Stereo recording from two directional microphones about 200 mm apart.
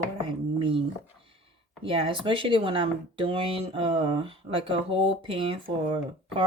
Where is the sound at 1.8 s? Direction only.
25° right (ahead or behind).